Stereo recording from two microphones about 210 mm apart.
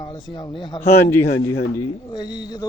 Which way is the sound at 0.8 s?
10° left (ahead or behind).